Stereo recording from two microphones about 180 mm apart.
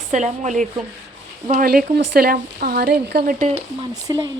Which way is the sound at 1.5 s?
55° right (ahead or behind).